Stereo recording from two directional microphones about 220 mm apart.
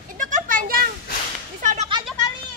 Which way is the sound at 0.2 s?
35° right (ahead or behind).